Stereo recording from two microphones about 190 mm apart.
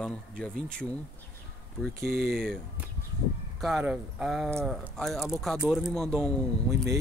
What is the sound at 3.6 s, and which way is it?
Speech, centre (ahead or behind).